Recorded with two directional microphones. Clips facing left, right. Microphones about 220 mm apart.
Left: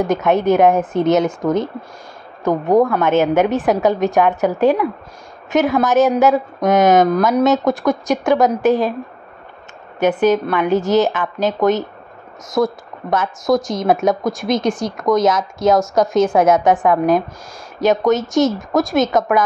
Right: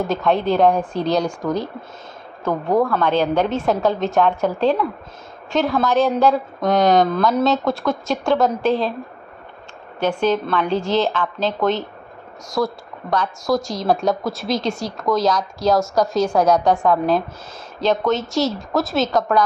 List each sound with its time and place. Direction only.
0.0 s a woman's voice: 20° left (ahead or behind)
9.9 s a woman's voice: 20° left (ahead or behind)